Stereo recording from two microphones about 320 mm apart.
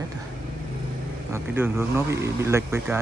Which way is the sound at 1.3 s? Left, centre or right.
Centre.